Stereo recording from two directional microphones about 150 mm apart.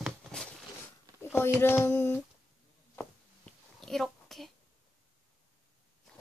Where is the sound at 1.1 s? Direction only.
15° left (ahead or behind).